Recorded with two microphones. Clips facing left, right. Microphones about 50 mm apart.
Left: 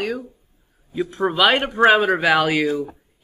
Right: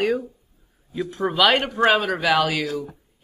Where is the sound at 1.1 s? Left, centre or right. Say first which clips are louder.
Left 1 dB; centre.